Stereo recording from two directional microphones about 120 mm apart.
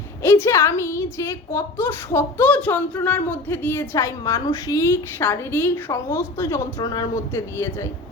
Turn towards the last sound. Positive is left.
turn(degrees=25)  # may be behind; listen again after turning